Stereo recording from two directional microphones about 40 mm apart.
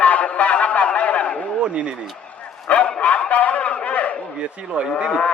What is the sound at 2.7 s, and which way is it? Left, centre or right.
Bow-wow, left.